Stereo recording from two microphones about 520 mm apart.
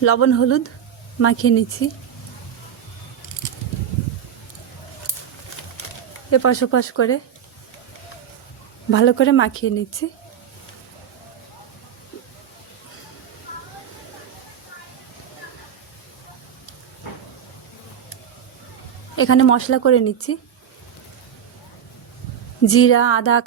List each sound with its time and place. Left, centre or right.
0.0 s a woman's voice: left
6.3 s a woman's voice: left
8.9 s a woman's voice: left
19.1 s a woman's voice: left
22.6 s a woman's voice: left